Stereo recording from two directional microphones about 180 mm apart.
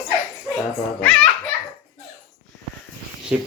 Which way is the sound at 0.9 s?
5° left (ahead or behind).